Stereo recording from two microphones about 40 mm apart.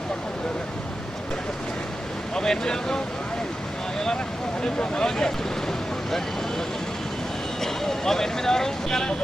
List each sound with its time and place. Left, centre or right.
2.3 s speech: centre
4.6 s speech: centre
7.6 s speech: centre